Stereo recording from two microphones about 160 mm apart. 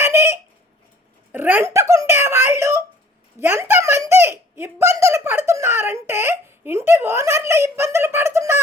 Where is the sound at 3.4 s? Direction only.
15° right (ahead or behind).